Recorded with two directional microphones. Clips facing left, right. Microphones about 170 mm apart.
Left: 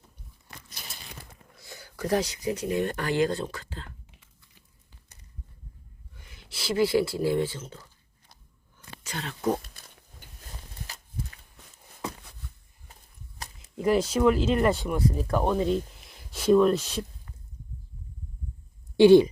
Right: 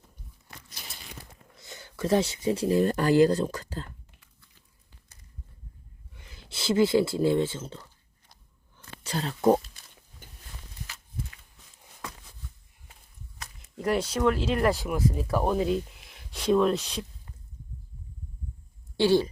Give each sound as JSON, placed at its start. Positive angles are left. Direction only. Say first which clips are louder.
{"t": 1.5, "sound": "speech", "louder": "right 1 dB", "side_deg": -20}
{"t": 6.1, "sound": "speech", "louder": "right 2 dB", "side_deg": -30}
{"t": 9.0, "sound": "speech", "louder": "right 6 dB", "side_deg": -35}
{"t": 13.4, "sound": "a sound", "louder": "left 3 dB", "side_deg": 35}
{"t": 13.7, "sound": "speech", "louder": "left 3 dB", "side_deg": 0}
{"t": 18.9, "sound": "speech", "louder": "left 7 dB", "side_deg": 15}